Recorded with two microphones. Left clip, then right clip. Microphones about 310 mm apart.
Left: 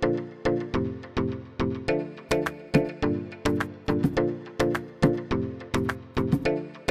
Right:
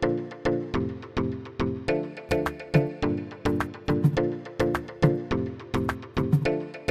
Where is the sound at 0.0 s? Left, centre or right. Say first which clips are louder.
Even; centre.